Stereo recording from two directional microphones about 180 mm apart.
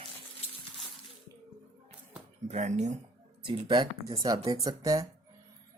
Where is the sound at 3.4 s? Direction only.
25° right (ahead or behind).